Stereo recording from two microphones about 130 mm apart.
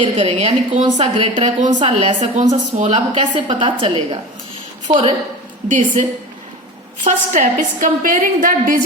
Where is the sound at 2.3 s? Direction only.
65° right (ahead or behind).